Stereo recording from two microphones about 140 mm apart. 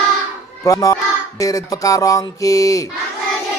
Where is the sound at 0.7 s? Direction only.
25° left (ahead or behind).